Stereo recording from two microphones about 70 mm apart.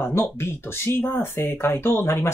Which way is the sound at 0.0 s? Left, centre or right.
Left.